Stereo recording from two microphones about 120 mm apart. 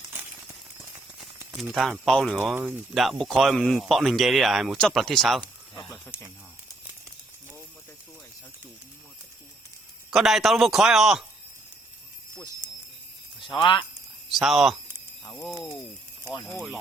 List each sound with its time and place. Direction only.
1.5 s speech: centre (ahead or behind)
5.9 s speech: 20° left (ahead or behind)
10.1 s speech: centre (ahead or behind)
13.6 s speech: 40° left (ahead or behind)
14.3 s speech: centre (ahead or behind)
15.2 s a sound: 15° left (ahead or behind)